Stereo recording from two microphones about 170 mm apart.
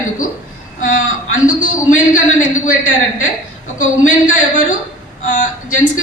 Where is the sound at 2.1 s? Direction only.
50° left (ahead or behind).